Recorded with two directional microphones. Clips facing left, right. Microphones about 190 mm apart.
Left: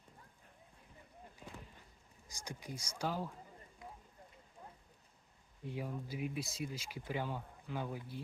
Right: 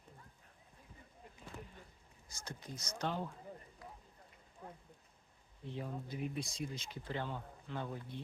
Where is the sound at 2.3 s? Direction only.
15° left (ahead or behind).